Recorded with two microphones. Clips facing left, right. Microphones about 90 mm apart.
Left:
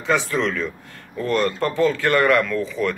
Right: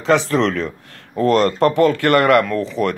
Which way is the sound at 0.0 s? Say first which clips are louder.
Right 5 dB; 80° right.